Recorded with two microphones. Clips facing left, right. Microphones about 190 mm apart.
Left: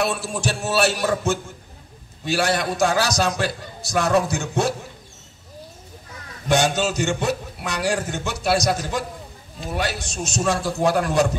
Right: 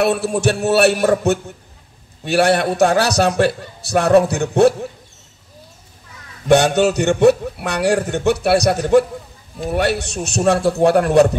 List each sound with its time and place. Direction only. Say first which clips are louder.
0.0 s a man's voice: right 8 dB; 60° right (ahead or behind)
6.5 s a man's voice: right 7 dB; 65° right (ahead or behind)